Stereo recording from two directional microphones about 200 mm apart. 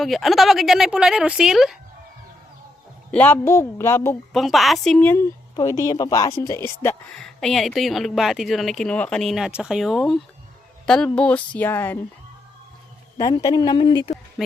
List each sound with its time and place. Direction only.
0.0 s speech: centre (ahead or behind)
3.1 s speech: 10° left (ahead or behind)
4.4 s speech: centre (ahead or behind)
13.1 s a woman's voice: 20° left (ahead or behind)
14.4 s speech: centre (ahead or behind)